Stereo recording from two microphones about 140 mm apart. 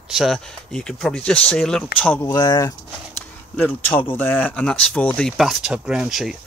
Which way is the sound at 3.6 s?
10° left (ahead or behind).